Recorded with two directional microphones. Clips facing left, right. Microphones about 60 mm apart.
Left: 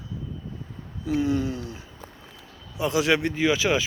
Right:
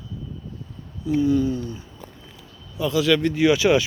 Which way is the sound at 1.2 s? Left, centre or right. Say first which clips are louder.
Right 5 dB; left.